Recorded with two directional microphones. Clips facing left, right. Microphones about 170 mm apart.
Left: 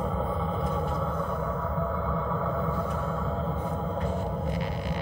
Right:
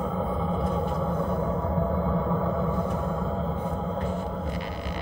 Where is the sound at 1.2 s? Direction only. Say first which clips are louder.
Right 4 dB; 20° right (ahead or behind).